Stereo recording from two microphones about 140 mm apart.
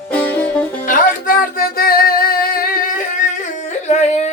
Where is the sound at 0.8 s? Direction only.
75° left (ahead or behind).